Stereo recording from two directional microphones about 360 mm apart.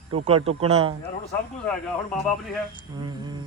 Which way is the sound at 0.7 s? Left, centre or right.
Centre.